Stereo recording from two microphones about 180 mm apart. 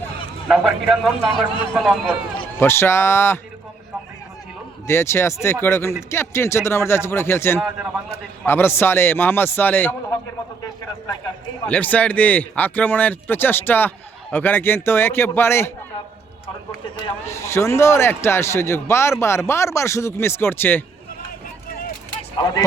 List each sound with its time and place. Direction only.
0.4 s a man's voice: centre (ahead or behind)
2.6 s a man's voice: 15° left (ahead or behind)
4.9 s a man's voice: 15° left (ahead or behind)
7.6 s a man's voice: 5° right (ahead or behind)
8.4 s a man's voice: 15° left (ahead or behind)
11.6 s a man's voice: 10° left (ahead or behind)
17.2 s a man's voice: 15° left (ahead or behind)
22.4 s speech: 25° left (ahead or behind)